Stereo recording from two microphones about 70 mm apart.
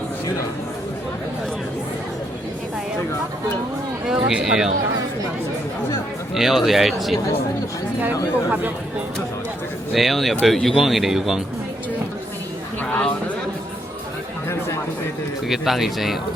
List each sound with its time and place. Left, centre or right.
4.0 s speech: centre
6.3 s a man's voice: centre
9.9 s a man's voice: centre
12.8 s a sound: centre
15.4 s a man's voice: centre